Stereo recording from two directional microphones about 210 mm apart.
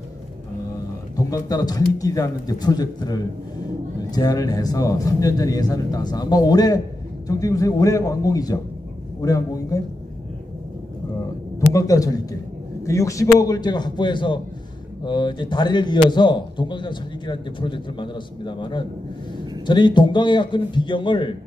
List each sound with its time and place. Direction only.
1.1 s a man's voice: 15° left (ahead or behind)
11.7 s a man's voice: 15° left (ahead or behind)